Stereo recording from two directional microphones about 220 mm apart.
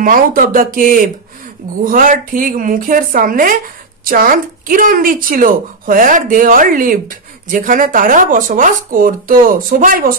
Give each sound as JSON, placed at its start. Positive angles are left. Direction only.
{"t": 0.0, "sound": "a woman's voice", "side_deg": -40}